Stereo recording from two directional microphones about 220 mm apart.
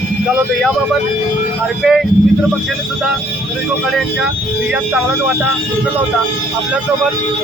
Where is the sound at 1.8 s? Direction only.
Centre (ahead or behind).